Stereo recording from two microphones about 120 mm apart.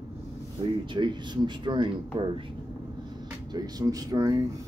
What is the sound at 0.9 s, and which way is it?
Speech, 40° right (ahead or behind).